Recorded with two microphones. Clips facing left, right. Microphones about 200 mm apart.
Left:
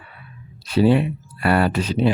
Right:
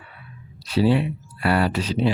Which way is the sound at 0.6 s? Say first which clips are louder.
Left 3 dB; 50° left (ahead or behind).